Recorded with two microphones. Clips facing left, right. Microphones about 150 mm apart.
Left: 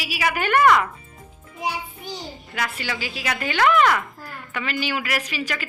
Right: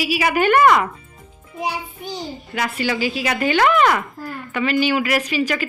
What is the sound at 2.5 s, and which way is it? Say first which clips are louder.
A woman's voice: right 7 dB; 15° right (ahead or behind).